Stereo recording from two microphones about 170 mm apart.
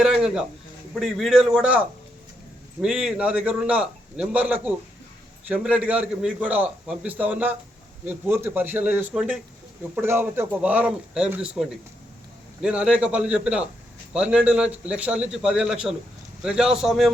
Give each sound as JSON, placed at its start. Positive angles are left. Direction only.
{"t": 0.0, "sound": "a sound", "side_deg": -5}
{"t": 0.9, "sound": "a man's voice", "side_deg": 0}
{"t": 2.8, "sound": "a man's voice", "side_deg": -5}